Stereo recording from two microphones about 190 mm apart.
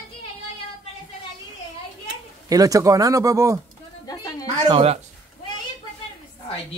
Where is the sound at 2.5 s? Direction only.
20° right (ahead or behind).